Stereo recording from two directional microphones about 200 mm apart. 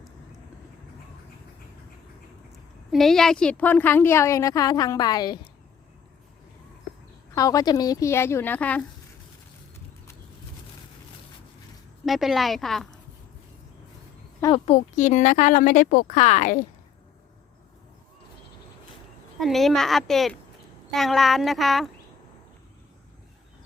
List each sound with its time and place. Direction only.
2.9 s a woman's voice: centre (ahead or behind); by 5.4 s 20° left (ahead or behind)
7.3 s a woman's voice: 15° left (ahead or behind)
12.0 s a woman's voice: centre (ahead or behind)
14.7 s a woman's voice: 35° left (ahead or behind)
19.4 s a woman's voice: centre (ahead or behind)